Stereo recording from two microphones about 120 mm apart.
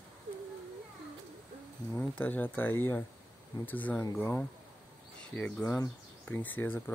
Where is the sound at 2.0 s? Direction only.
15° left (ahead or behind).